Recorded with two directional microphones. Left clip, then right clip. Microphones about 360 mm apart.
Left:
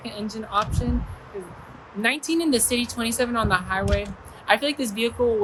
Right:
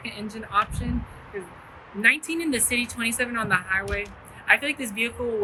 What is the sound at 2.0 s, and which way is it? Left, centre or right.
A woman's voice, centre.